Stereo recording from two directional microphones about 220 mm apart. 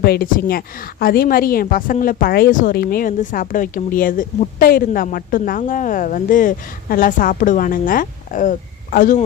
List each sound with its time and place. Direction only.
0.0 s a woman's voice: 45° left (ahead or behind)